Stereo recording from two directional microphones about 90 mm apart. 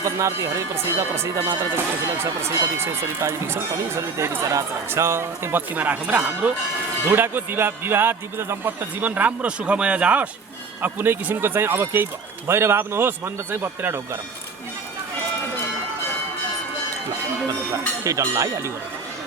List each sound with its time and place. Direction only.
0.0 s speech: 35° right (ahead or behind)
18.0 s speech: 35° right (ahead or behind)